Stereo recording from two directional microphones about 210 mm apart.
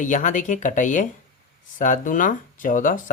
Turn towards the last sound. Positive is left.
turn(degrees=40)  # may be behind; listen again after turning